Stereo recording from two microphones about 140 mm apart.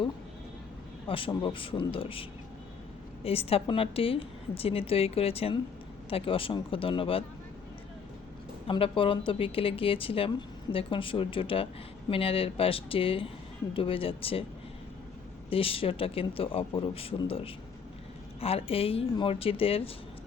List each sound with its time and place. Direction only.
1.0 s speech: 40° left (ahead or behind)
3.2 s a woman's voice: 45° left (ahead or behind)
8.6 s speech: 40° left (ahead or behind)
15.4 s a woman's voice: 40° left (ahead or behind)